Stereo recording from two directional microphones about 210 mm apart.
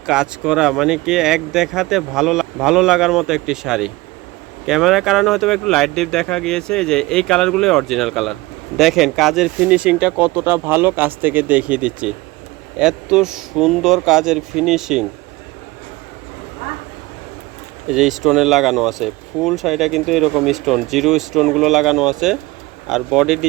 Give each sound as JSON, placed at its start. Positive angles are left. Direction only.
{"t": 0.0, "sound": "speech", "side_deg": -5}
{"t": 17.8, "sound": "speech", "side_deg": 0}